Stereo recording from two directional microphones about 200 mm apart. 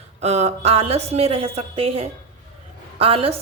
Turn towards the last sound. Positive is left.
turn(degrees=-30)  # may be behind; listen again after turning